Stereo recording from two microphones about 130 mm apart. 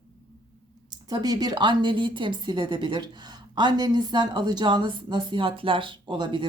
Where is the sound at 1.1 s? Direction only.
30° right (ahead or behind).